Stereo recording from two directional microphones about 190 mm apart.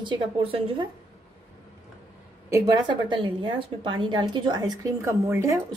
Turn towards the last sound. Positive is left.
turn(degrees=-15)  # may be behind; listen again after turning